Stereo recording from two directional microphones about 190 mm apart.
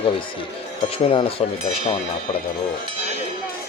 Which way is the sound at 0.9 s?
30° left (ahead or behind).